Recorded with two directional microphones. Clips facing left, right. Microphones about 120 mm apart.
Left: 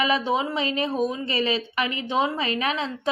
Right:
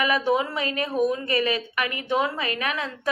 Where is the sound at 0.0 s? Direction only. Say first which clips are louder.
Right 1 dB; 25° left (ahead or behind).